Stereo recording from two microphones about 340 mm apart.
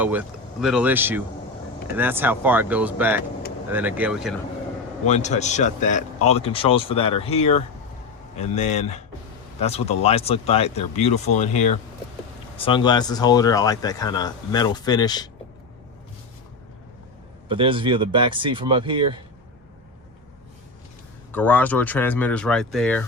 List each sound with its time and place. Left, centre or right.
0.0 s speech: centre
5.0 s a man's voice: centre
17.5 s speech: centre
21.3 s speech: centre